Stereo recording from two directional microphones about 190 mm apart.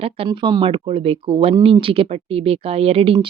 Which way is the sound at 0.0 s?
25° right (ahead or behind).